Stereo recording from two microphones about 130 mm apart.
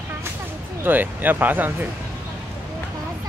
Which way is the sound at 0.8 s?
15° right (ahead or behind).